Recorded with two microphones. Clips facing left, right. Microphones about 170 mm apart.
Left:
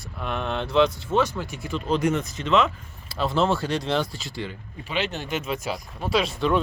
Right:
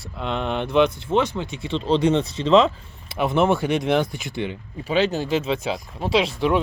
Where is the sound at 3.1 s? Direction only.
20° right (ahead or behind).